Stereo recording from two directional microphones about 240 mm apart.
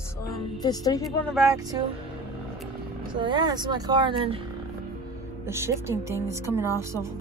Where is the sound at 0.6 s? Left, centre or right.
Centre.